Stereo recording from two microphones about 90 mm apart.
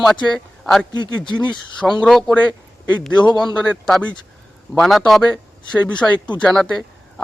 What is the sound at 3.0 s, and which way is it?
A man's voice, 10° left (ahead or behind).